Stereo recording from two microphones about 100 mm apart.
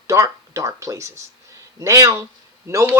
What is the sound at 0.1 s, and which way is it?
Speech, 30° right (ahead or behind).